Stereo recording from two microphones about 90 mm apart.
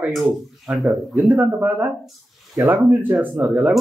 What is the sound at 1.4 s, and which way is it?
Speech, 20° right (ahead or behind).